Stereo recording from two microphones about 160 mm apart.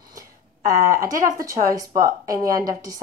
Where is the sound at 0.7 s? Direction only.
60° right (ahead or behind).